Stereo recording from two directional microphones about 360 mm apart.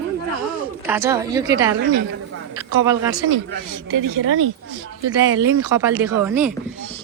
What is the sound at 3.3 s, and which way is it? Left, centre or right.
Speech, right.